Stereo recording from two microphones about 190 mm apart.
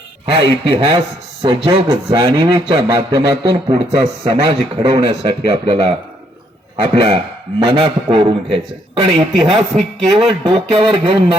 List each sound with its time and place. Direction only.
0.3 s a man's voice: 30° right (ahead or behind)
9.4 s a man's voice: centre (ahead or behind)
10.4 s speech: 30° right (ahead or behind)